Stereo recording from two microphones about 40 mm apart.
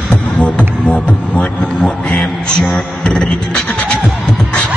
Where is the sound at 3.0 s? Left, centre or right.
Centre.